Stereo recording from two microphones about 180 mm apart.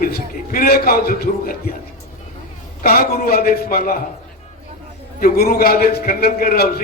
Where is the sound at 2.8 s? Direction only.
55° left (ahead or behind).